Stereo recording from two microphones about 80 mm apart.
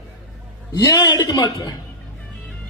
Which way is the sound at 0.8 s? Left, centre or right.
Left.